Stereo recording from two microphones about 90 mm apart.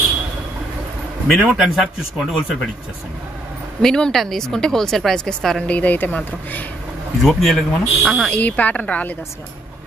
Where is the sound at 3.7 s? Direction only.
10° left (ahead or behind).